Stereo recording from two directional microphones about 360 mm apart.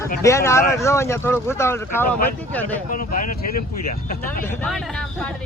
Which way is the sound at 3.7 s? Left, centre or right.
Left.